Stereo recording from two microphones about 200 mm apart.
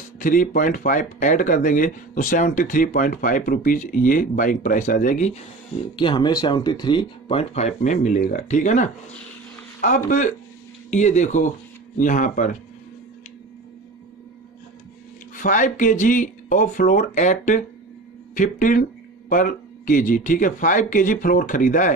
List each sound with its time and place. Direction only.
0.2 s speech: 45° left (ahead or behind)
5.9 s speech: 25° left (ahead or behind); by 12.4 s 40° left (ahead or behind)
15.3 s speech: 40° left (ahead or behind)